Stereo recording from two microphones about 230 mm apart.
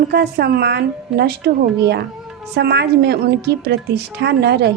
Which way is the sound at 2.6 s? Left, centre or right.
Right.